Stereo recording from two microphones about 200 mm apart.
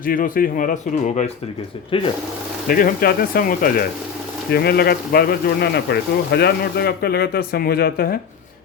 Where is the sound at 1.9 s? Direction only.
25° left (ahead or behind).